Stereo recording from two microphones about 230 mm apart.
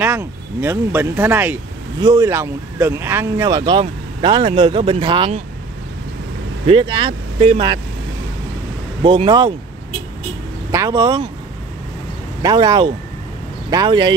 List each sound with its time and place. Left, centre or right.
0.0 s speech: centre
6.7 s speech: right
9.0 s speech: right
10.7 s speech: centre
12.4 s speech: centre